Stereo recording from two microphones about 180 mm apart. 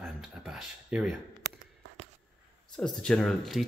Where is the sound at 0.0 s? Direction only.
Centre (ahead or behind).